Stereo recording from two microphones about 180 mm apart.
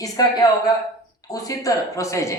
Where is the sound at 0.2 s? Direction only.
20° left (ahead or behind).